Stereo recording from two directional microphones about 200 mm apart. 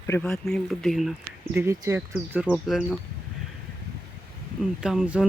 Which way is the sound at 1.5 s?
15° right (ahead or behind).